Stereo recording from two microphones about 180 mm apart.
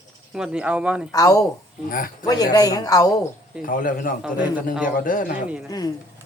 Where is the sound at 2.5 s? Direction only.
20° left (ahead or behind).